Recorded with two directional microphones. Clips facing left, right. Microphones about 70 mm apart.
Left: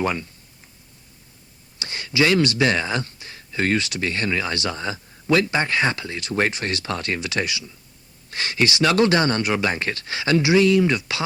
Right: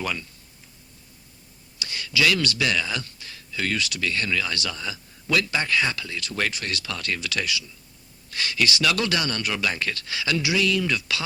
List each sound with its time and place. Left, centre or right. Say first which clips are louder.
0.0 s speech: left 6 dB; left
1.8 s speech: left 3 dB; left